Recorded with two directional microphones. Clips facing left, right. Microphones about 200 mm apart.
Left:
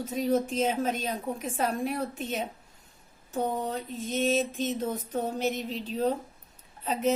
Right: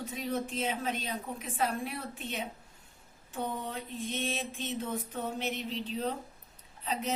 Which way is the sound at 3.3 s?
40° left (ahead or behind).